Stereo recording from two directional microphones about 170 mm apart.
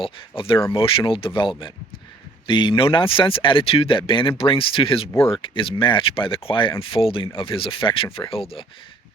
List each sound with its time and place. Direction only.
0.0 s speech: 30° left (ahead or behind)